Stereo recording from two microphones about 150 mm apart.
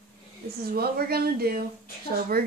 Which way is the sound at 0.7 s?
90° right.